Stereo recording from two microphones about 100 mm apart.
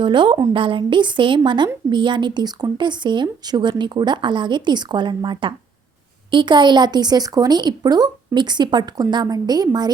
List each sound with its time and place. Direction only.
0.0 s a woman's voice: 50° right (ahead or behind)